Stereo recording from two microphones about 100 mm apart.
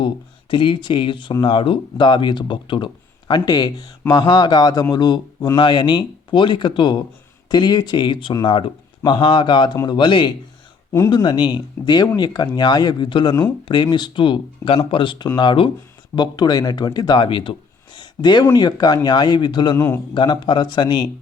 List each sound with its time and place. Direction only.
0.5 s speech: 55° left (ahead or behind)
17.9 s a sound: 50° left (ahead or behind)
18.4 s speech: 40° left (ahead or behind)
19.7 s a man's voice: 25° left (ahead or behind)
20.1 s speech: 50° left (ahead or behind)